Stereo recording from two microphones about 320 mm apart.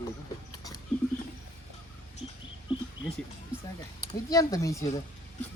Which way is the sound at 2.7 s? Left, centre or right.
Centre.